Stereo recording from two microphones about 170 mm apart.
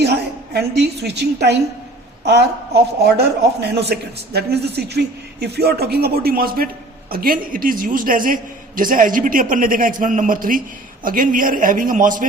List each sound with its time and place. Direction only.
0.0 s a woman's voice: 70° right (ahead or behind); by 12.3 s 50° right (ahead or behind)